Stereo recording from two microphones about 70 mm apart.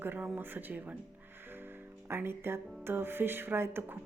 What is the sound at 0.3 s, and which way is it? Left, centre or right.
Speech, right.